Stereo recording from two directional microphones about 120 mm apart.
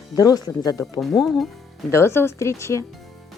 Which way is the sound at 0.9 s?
Centre (ahead or behind).